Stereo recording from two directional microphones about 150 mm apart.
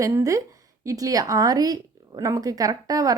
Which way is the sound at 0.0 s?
20° right (ahead or behind).